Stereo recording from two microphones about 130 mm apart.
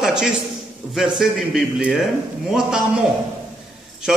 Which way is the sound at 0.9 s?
Centre (ahead or behind).